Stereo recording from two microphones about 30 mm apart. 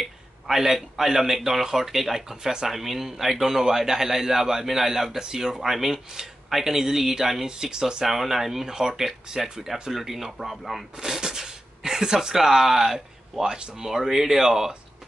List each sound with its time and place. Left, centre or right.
0.6 s speech: centre
7.4 s speech: right
8.0 s speech: centre
11.0 s speech: right